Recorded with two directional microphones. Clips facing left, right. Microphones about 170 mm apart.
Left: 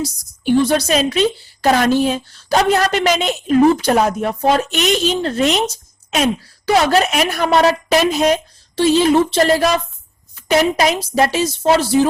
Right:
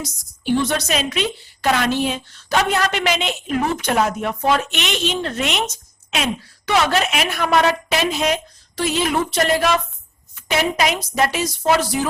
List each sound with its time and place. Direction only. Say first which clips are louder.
0.6 s a woman's voice: left 6 dB; 30° left (ahead or behind)